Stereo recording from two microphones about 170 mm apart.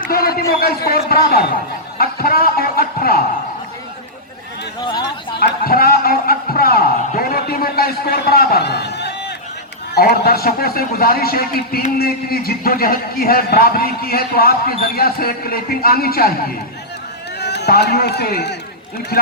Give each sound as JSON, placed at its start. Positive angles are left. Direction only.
{"t": 0.0, "sound": "speech", "side_deg": 60}
{"t": 5.0, "sound": "speech", "side_deg": 75}
{"t": 9.9, "sound": "speech", "side_deg": 65}
{"t": 17.4, "sound": "speech", "side_deg": 80}